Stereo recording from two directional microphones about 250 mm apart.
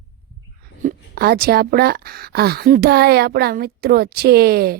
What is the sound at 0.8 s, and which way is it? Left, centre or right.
Speech, right.